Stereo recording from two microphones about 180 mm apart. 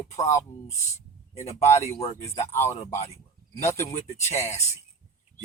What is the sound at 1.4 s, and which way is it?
Speech, 40° left (ahead or behind).